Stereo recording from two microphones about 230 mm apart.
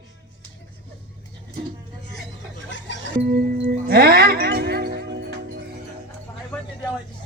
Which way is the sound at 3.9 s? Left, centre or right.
Right.